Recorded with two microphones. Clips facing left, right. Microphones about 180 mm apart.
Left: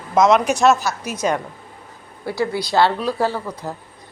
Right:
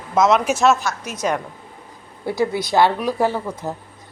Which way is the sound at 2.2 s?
20° right (ahead or behind).